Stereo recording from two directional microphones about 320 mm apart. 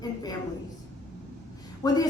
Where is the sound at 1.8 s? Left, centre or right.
Centre.